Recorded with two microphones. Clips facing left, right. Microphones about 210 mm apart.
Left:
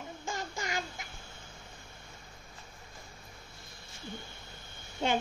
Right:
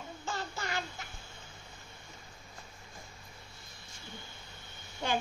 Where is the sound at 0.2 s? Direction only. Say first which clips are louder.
Even; 15° left (ahead or behind).